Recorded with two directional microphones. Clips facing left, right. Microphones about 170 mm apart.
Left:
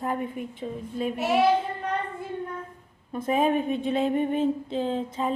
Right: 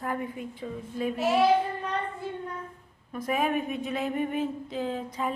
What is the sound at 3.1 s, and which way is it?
A woman's voice, 25° left (ahead or behind).